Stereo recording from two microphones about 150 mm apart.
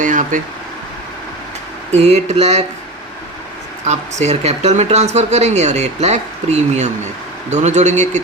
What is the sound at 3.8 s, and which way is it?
A man's voice, 50° right (ahead or behind).